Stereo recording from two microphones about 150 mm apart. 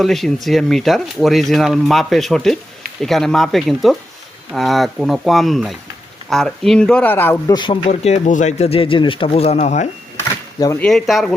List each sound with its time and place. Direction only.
0.0 s speech: centre (ahead or behind)
7.5 s speech: 30° left (ahead or behind)
7.9 s speech: 45° left (ahead or behind)
10.8 s speech: 5° left (ahead or behind)